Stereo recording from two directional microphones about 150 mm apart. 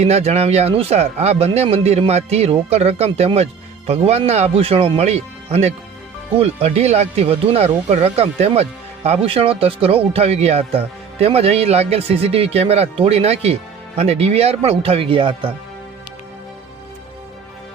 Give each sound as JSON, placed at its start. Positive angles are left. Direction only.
{"t": 0.0, "sound": "speech", "side_deg": -45}